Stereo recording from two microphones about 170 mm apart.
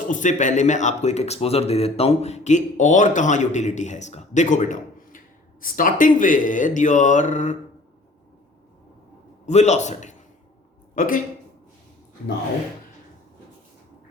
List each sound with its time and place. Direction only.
0.1 s speech: 45° left (ahead or behind)
9.5 s a man's voice: 40° left (ahead or behind)